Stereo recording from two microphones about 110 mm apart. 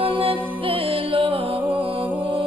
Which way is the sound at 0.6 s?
55° right (ahead or behind).